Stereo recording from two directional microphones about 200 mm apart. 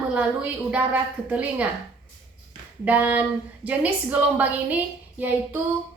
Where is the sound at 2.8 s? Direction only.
10° right (ahead or behind).